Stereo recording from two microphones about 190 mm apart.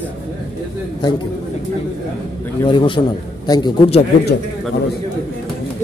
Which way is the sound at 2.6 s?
25° left (ahead or behind).